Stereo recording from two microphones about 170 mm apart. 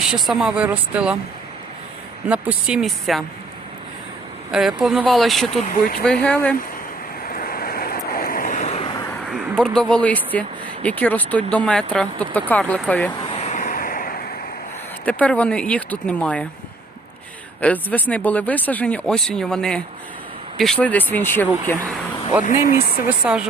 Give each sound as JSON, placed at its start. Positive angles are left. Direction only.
{"t": 0.1, "sound": "speech", "side_deg": -5}
{"t": 2.3, "sound": "speech", "side_deg": -5}
{"t": 4.5, "sound": "speech", "side_deg": -5}
{"t": 5.6, "sound": "speech", "side_deg": 50}
{"t": 6.0, "sound": "speech", "side_deg": 5}
{"t": 7.3, "sound": "vehicle", "side_deg": 55}
{"t": 9.3, "sound": "speech", "side_deg": 5}
{"t": 13.3, "sound": "vehicle", "side_deg": 45}
{"t": 15.0, "sound": "speech", "side_deg": 10}
{"t": 17.6, "sound": "speech", "side_deg": 10}
{"t": 22.4, "sound": "speech", "side_deg": 50}
{"t": 23.0, "sound": "speech", "side_deg": -5}